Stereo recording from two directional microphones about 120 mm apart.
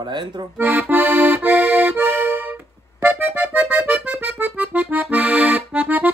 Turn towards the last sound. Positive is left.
turn(degrees=-15)  # may be behind; listen again after turning